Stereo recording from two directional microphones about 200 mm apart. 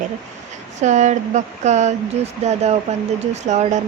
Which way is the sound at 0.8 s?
35° right (ahead or behind).